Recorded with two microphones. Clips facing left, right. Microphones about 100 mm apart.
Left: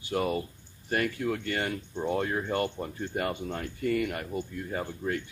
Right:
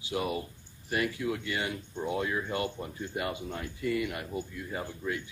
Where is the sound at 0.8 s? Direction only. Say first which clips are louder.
Left 2 dB; 50° left (ahead or behind).